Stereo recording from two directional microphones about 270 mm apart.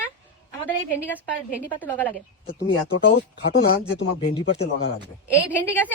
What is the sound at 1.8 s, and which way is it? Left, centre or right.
Speech, centre.